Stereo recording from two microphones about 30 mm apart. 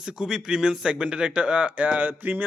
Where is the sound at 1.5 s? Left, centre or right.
Right.